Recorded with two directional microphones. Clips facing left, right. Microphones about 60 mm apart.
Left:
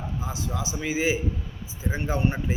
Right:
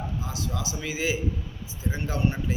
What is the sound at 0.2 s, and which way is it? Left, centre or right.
A man's voice, centre.